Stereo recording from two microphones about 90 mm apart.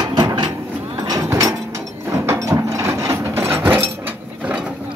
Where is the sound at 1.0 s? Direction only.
40° right (ahead or behind).